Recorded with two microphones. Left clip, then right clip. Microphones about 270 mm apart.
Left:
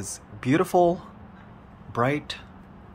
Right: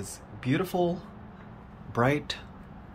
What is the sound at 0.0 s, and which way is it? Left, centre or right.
Speech, centre.